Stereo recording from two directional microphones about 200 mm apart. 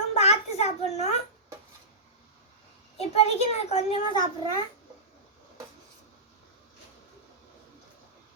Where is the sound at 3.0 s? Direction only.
30° left (ahead or behind).